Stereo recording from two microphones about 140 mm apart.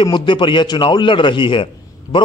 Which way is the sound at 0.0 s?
35° left (ahead or behind).